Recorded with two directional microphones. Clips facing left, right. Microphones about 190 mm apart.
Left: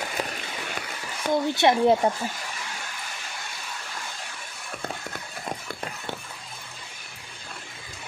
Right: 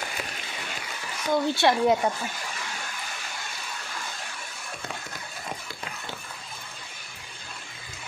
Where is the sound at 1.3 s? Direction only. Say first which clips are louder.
Left 1 dB; 20° left (ahead or behind).